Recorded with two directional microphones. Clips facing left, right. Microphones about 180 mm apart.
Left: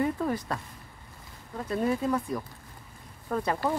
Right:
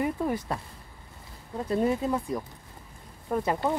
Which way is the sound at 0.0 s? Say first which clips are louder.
Even; 15° right (ahead or behind).